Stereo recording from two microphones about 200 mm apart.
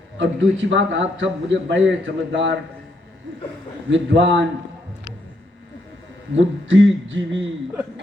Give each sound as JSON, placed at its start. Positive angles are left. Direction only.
{"t": 0.2, "sound": "a man's voice", "side_deg": -65}
{"t": 3.8, "sound": "a man's voice", "side_deg": -65}
{"t": 6.3, "sound": "a man's voice", "side_deg": -70}